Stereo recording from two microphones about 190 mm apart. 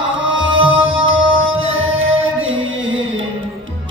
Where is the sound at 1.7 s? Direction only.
90° right.